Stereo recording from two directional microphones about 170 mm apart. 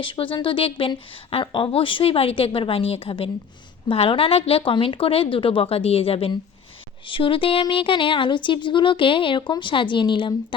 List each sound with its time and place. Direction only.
0.0 s a woman's voice: 30° left (ahead or behind)